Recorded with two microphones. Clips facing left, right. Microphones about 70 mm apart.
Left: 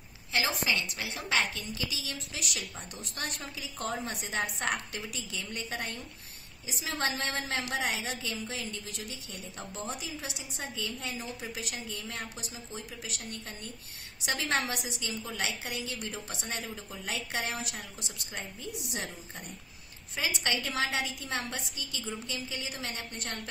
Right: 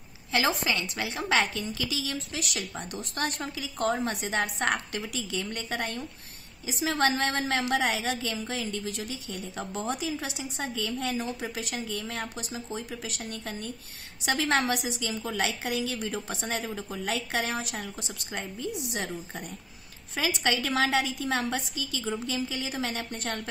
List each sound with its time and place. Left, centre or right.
0.3 s a sound: right
0.7 s a woman's voice: right
2.0 s a woman's voice: right
6.6 s a woman's voice: right
14.5 s speech: right
16.7 s a woman's voice: right
18.3 s a woman's voice: right
20.2 s a woman's voice: right